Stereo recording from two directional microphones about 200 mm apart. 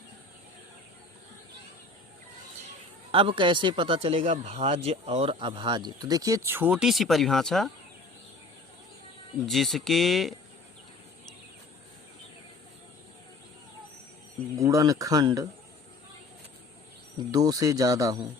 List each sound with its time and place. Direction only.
3.1 s speech: 25° right (ahead or behind); by 7.7 s centre (ahead or behind)
9.5 s speech: centre (ahead or behind)
14.5 s speech: 15° right (ahead or behind)
17.2 s speech: 20° right (ahead or behind)